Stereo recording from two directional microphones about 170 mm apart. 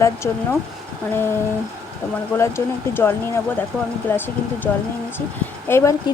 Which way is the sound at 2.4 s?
15° left (ahead or behind).